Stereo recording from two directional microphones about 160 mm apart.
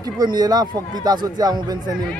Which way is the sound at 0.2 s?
25° right (ahead or behind).